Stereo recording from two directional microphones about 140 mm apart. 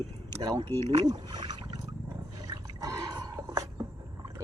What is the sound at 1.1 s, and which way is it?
Rowboat, 30° right (ahead or behind).